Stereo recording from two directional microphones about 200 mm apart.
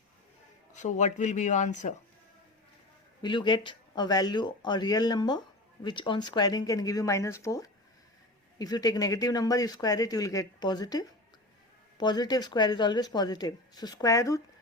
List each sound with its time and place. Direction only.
0.8 s speech: 35° left (ahead or behind)
3.2 s speech: 25° left (ahead or behind)